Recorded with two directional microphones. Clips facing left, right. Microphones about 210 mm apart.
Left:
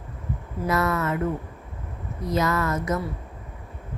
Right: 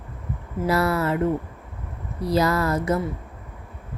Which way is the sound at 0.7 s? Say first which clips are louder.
Right 2 dB; 30° right (ahead or behind).